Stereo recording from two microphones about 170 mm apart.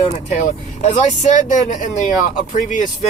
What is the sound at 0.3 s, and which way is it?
Speech, 45° left (ahead or behind).